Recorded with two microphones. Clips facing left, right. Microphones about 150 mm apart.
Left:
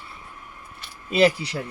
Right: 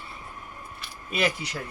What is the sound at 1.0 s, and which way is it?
Speech, 30° left (ahead or behind).